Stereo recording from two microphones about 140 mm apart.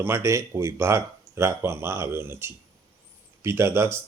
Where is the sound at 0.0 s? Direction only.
15° right (ahead or behind).